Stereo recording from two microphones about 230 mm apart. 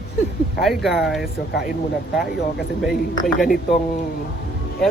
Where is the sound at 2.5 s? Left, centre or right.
Centre.